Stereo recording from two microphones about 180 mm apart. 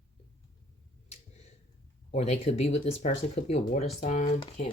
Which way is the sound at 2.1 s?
35° left (ahead or behind).